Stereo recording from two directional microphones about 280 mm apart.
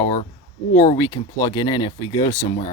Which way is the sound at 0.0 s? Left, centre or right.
Left.